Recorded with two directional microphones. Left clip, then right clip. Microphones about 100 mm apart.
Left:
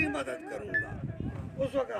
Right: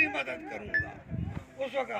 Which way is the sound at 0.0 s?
50° left (ahead or behind).